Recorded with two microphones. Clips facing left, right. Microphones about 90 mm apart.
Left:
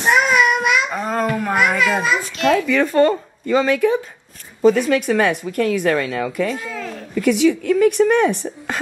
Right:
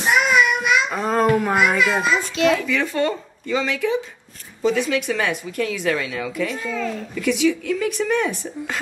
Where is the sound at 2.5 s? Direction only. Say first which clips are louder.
Left 6 dB; 50° left (ahead or behind).